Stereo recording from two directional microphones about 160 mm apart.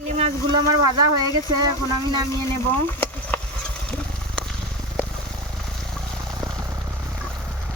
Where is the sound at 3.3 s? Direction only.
10° left (ahead or behind).